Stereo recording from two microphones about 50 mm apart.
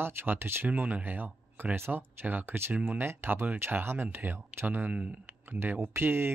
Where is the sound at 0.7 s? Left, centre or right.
Right.